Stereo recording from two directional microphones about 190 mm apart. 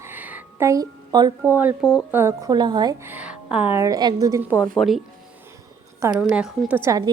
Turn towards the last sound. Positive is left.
turn(degrees=-15)  # may be behind; listen again after turning